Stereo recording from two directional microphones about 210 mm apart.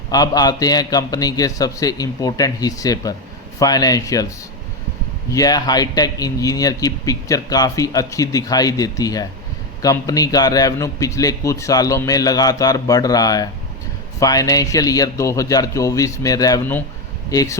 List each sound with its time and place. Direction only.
0.1 s speech: 20° left (ahead or behind)
5.3 s speech: 15° left (ahead or behind)